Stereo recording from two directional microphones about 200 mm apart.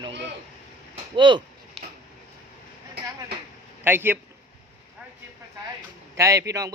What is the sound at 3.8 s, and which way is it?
Speech, 10° right (ahead or behind).